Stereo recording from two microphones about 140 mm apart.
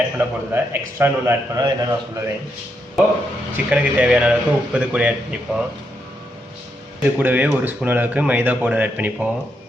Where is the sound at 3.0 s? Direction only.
Centre (ahead or behind).